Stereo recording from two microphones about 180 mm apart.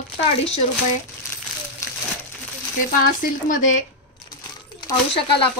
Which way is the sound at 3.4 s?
45° left (ahead or behind).